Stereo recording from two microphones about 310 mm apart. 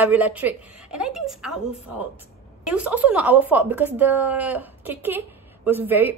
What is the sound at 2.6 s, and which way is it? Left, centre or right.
A woman's voice, centre.